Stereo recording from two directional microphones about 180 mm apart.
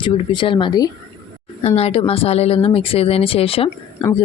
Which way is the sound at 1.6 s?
35° left (ahead or behind).